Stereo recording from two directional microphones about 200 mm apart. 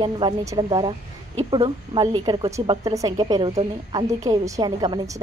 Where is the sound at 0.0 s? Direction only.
20° right (ahead or behind).